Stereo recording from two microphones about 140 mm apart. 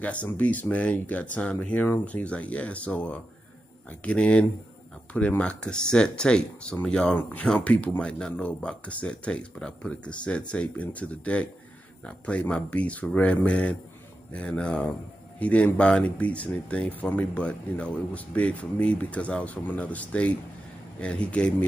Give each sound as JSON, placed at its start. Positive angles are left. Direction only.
{"t": 0.0, "sound": "speech", "side_deg": 10}